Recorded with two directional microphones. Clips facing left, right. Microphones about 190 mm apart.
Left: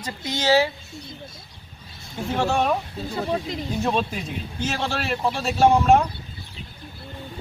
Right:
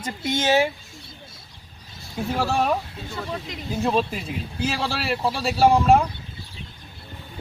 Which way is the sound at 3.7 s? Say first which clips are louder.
Right 2 dB; centre (ahead or behind).